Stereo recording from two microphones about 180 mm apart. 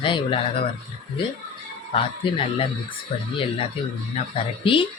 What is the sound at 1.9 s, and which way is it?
Speech, 30° left (ahead or behind).